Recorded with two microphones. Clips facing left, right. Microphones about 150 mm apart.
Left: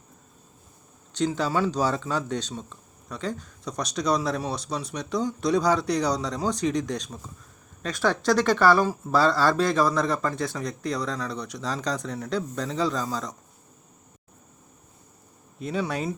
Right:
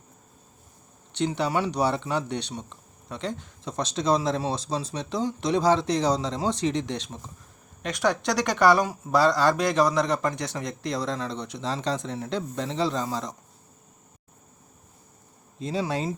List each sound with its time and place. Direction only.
1.1 s speech: 20° right (ahead or behind)
15.7 s speech: 30° right (ahead or behind)